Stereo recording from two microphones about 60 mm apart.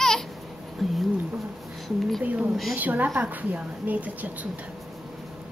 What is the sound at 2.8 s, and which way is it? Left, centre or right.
A woman's voice, right.